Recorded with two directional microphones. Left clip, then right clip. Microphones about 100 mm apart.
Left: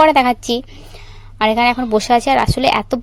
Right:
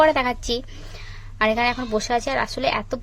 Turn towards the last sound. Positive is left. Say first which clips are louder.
# left 8 dB
turn(degrees=85)